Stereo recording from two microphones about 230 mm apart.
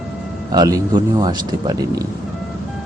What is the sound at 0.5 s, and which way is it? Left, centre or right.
Speech, centre.